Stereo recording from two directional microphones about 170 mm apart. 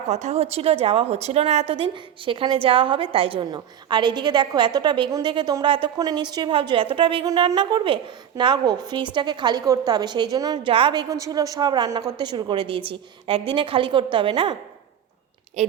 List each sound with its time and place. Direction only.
0.1 s a woman's voice: 40° right (ahead or behind)
15.6 s speech: 45° right (ahead or behind)